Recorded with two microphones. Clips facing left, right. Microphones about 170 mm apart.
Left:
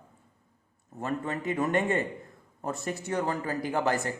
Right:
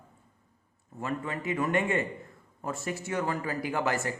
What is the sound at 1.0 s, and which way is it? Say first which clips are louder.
A man's voice: left 2 dB; 40° left (ahead or behind).